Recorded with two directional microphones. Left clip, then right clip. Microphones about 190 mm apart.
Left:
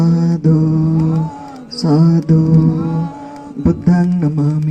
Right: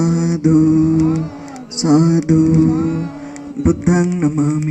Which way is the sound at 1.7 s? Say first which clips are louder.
Right 1 dB; 30° left (ahead or behind).